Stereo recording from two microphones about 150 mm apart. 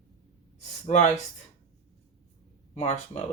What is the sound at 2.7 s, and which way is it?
Speech, 50° left (ahead or behind).